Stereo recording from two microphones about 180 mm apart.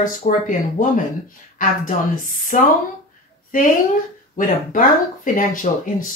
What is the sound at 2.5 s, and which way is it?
Speech, 45° left (ahead or behind).